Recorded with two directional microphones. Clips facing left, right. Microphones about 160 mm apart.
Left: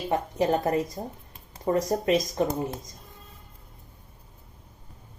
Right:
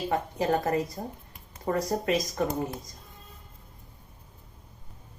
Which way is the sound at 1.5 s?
30° left (ahead or behind).